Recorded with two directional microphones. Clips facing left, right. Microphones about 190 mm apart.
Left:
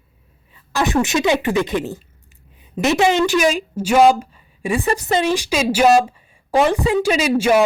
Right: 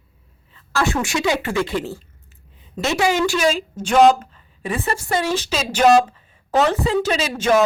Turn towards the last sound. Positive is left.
turn(degrees=10)  # may be behind; listen again after turning